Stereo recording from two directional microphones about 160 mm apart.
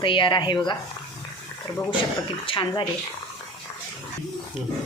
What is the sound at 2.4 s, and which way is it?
Speech, 30° left (ahead or behind).